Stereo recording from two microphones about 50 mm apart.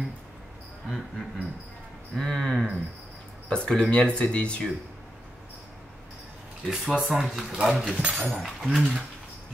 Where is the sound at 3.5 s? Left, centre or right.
Centre.